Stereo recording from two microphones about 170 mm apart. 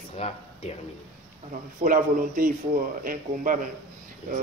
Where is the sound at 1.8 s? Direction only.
55° right (ahead or behind).